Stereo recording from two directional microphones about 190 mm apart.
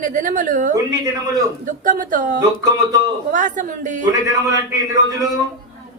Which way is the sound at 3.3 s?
45° right (ahead or behind).